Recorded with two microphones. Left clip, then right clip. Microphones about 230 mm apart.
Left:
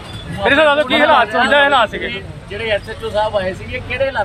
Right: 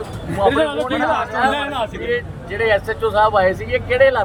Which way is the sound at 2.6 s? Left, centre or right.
Centre.